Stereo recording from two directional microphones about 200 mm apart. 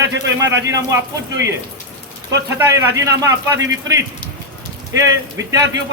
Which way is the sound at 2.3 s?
15° right (ahead or behind).